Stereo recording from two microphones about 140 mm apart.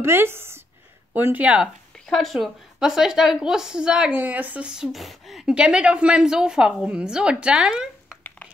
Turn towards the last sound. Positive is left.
turn(degrees=-5)  # may be behind; listen again after turning